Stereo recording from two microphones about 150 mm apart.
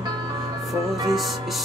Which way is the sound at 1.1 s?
Centre (ahead or behind).